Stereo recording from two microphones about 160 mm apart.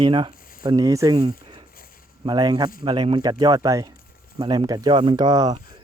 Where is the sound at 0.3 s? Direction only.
60° left (ahead or behind).